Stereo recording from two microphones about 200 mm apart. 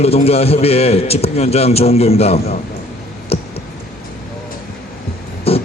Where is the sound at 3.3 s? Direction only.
30° left (ahead or behind).